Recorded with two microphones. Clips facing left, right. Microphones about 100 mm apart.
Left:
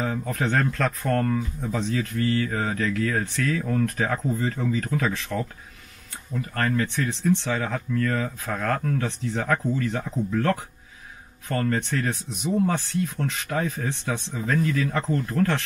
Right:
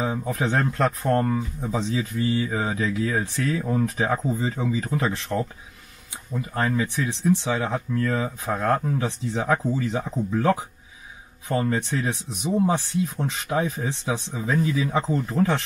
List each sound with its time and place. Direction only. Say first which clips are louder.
0.0 s a man's voice: right 1 dB; 15° right (ahead or behind)
6.3 s speech: right 1 dB; 15° right (ahead or behind)
7.0 s speech: right 1 dB; 5° right (ahead or behind)
12.5 s speech: right 2 dB; 20° right (ahead or behind)
13.0 s speech: right 1 dB; 5° right (ahead or behind)